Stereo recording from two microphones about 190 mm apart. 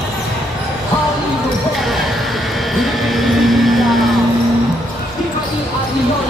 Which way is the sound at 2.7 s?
Centre (ahead or behind).